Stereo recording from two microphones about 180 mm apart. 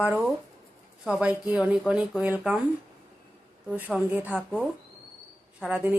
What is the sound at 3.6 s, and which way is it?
Speech, 10° right (ahead or behind).